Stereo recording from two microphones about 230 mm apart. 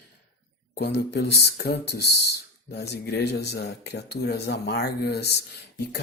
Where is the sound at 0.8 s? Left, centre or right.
Left.